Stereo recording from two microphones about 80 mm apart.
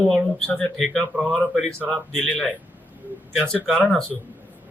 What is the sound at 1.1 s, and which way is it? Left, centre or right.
Speech, centre.